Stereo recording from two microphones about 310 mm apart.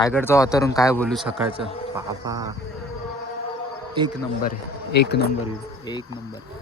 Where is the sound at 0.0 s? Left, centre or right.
Centre.